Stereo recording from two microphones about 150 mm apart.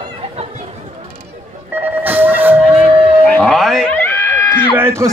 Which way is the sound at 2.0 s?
10° right (ahead or behind).